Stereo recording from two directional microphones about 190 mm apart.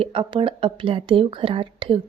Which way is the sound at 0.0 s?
25° right (ahead or behind).